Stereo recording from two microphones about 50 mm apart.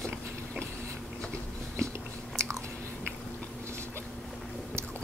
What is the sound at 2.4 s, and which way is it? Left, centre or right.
Biting, right.